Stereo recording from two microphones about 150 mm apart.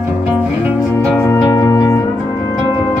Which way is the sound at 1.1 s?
15° left (ahead or behind).